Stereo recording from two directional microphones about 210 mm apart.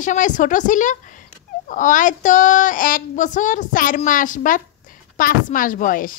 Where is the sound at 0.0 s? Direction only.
35° left (ahead or behind).